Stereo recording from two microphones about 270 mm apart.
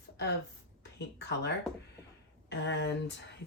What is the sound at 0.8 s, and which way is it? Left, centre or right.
Speech, left.